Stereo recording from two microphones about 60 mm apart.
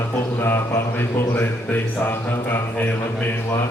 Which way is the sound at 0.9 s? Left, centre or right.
Left.